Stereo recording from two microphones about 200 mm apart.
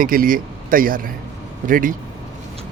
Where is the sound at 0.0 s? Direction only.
45° right (ahead or behind).